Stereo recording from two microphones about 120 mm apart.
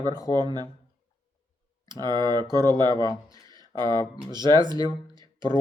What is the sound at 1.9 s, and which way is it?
Speech, 35° right (ahead or behind).